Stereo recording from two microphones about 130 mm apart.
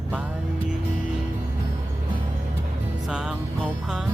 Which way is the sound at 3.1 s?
5° right (ahead or behind).